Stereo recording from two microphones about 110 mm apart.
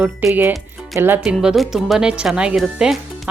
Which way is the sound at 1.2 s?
5° right (ahead or behind).